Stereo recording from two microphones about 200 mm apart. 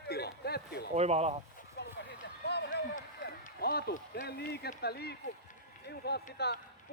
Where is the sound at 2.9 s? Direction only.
50° left (ahead or behind).